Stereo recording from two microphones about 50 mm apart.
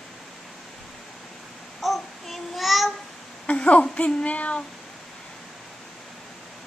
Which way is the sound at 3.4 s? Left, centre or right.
Left.